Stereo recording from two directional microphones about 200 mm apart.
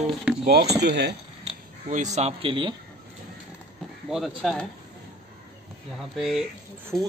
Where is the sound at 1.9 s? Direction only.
35° right (ahead or behind).